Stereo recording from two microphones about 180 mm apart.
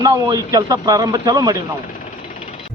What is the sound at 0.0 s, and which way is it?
A man's voice, 20° right (ahead or behind).